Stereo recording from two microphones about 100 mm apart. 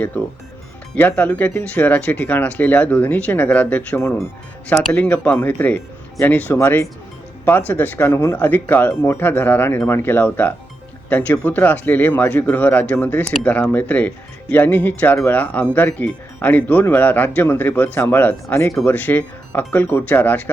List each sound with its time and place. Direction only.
0.9 s speech: 15° left (ahead or behind)